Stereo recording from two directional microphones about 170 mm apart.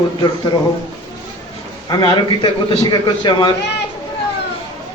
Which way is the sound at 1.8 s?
25° left (ahead or behind).